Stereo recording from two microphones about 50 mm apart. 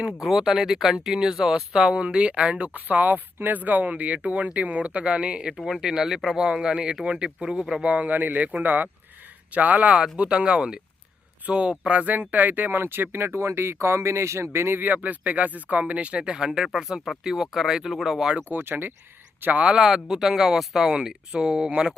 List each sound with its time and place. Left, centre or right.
0.0 s speech: centre
5.5 s speech: centre
7.9 s speech: right
10.0 s speech: centre; by 14.8 s right
14.8 s speech: right; by 18.3 s centre
18.5 s speech: right
19.4 s speech: right
19.6 s speech: centre